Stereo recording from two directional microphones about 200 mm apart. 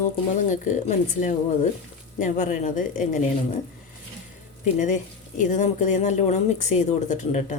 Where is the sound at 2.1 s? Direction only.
40° left (ahead or behind).